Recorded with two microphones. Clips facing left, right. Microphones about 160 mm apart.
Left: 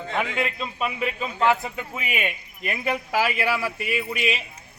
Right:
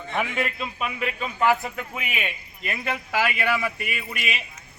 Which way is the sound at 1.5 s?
25° left (ahead or behind).